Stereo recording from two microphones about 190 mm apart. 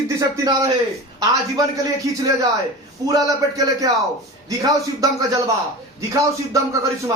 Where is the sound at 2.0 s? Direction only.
15° right (ahead or behind).